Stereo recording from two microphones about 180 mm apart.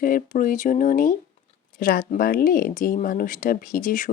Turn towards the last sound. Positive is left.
turn(degrees=50)  # may be behind; listen again after turning